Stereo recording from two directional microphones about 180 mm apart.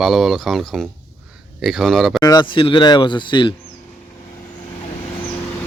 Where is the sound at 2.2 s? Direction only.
25° left (ahead or behind).